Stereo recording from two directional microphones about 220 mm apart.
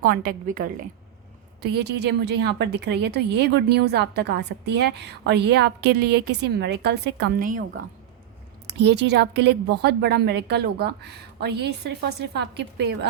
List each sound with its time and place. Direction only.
0.0 s a woman's voice: 40° right (ahead or behind)
1.6 s a woman's voice: 50° right (ahead or behind)
8.6 s a woman's voice: 50° right (ahead or behind)